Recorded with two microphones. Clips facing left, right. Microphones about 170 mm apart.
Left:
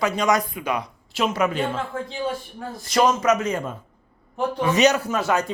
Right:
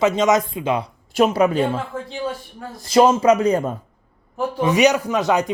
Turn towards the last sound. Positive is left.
turn(degrees=-15)  # may be behind; listen again after turning